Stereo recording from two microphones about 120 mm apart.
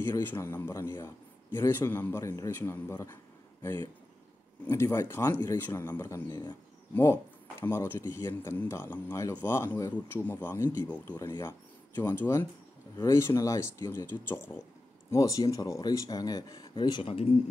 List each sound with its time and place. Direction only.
0.2 s a man's voice: 20° left (ahead or behind)
4.6 s a man's voice: 25° left (ahead or behind)
7.6 s a man's voice: 20° left (ahead or behind); by 17.1 s 40° left (ahead or behind)
17.1 s speech: 55° left (ahead or behind)